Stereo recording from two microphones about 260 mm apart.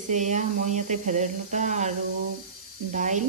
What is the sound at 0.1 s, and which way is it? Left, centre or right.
Speech, right.